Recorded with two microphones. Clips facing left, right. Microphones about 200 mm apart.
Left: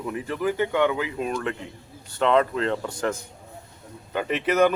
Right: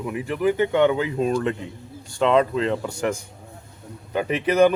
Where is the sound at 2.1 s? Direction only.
15° right (ahead or behind).